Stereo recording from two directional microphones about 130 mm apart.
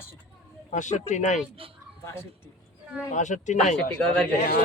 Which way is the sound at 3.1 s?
70° left (ahead or behind).